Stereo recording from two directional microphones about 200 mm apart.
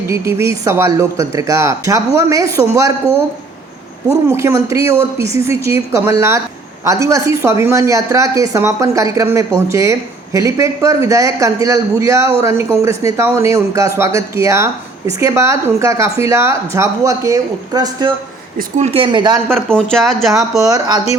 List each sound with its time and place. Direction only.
0.1 s speech: 15° right (ahead or behind)
19.5 s speech: 5° left (ahead or behind)
20.6 s speech: 15° right (ahead or behind)